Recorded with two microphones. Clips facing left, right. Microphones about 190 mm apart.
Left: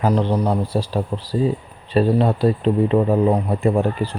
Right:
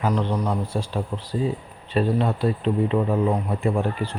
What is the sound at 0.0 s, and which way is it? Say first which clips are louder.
Speech: left 5 dB; 30° left (ahead or behind).